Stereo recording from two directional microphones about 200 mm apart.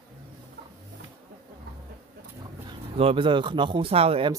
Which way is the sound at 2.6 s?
25° right (ahead or behind).